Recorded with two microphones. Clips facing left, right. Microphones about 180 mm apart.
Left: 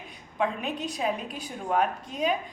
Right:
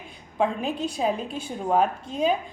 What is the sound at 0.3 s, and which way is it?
A woman's voice, 30° right (ahead or behind).